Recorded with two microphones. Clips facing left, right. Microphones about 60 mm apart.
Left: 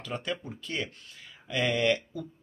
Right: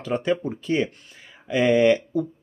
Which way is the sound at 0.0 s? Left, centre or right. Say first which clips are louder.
Right 11 dB; right.